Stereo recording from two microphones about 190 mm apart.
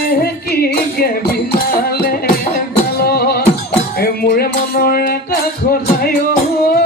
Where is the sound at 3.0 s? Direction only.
55° left (ahead or behind).